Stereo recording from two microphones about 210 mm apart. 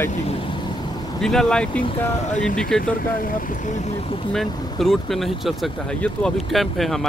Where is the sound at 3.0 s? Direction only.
40° left (ahead or behind).